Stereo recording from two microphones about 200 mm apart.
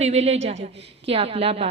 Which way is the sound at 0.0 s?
35° right (ahead or behind).